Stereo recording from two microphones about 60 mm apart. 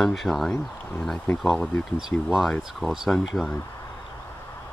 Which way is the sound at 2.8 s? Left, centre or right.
Centre.